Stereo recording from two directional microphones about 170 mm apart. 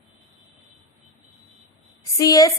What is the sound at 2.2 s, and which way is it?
Speech, 20° left (ahead or behind).